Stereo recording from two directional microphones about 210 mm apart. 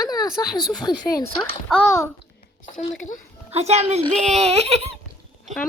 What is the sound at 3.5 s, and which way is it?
Speech, 30° right (ahead or behind).